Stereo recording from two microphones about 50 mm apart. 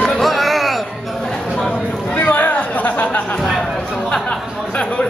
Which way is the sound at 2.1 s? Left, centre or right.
Left.